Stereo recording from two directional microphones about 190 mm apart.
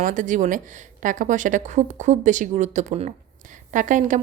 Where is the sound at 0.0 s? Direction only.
45° right (ahead or behind).